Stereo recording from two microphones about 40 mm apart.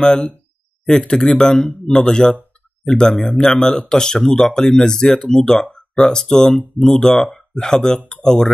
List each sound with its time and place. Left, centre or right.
0.0 s speech: centre